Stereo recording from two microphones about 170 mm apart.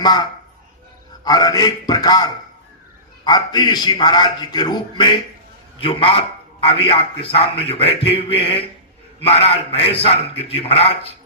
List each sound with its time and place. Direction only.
1.2 s a man's voice: 20° left (ahead or behind)